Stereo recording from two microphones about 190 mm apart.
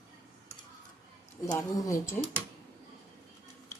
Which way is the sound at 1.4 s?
15° left (ahead or behind).